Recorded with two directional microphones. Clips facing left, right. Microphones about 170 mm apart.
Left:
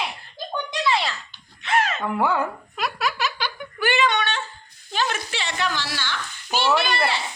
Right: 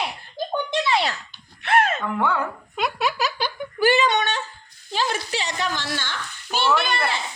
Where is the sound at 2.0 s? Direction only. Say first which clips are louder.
Left 1 dB; 10° left (ahead or behind).